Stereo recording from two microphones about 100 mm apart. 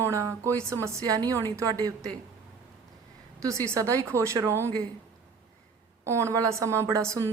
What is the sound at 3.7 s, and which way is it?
A woman's voice, 25° right (ahead or behind).